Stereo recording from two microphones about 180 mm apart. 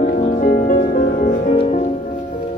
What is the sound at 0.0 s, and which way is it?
Music, 45° left (ahead or behind).